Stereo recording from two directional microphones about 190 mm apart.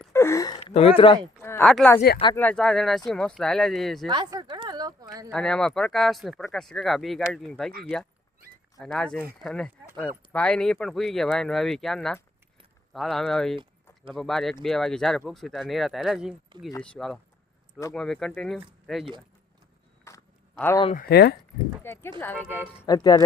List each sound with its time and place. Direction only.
0.1 s gasp: 15° left (ahead or behind)
0.6 s speech: 30° left (ahead or behind)
1.4 s speech: 10° left (ahead or behind)
4.1 s a sound: 20° right (ahead or behind)
5.3 s speech: 5° left (ahead or behind)
8.8 s speech: 5° left (ahead or behind)
20.1 s a sound: 15° left (ahead or behind)
20.9 s speech: 55° left (ahead or behind)
21.9 s speech: 10° left (ahead or behind)